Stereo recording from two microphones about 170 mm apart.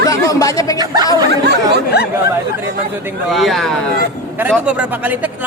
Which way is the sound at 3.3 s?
Centre (ahead or behind).